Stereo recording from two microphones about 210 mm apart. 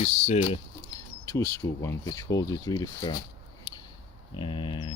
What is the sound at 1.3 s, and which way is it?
Speech, 15° left (ahead or behind).